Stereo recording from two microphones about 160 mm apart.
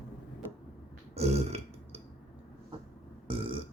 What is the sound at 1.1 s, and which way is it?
Burping, 40° right (ahead or behind).